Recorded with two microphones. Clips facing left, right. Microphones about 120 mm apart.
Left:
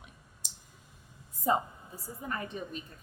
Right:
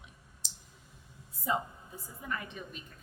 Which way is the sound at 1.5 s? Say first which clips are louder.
Left 4 dB; 45° left (ahead or behind).